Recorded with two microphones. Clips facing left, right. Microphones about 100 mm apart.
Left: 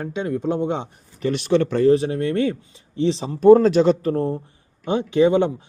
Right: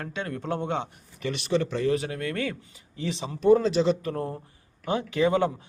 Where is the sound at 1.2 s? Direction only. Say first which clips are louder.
Left 7 dB; 50° left (ahead or behind).